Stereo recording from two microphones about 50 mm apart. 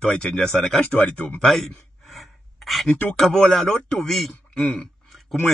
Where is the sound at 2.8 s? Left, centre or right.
Centre.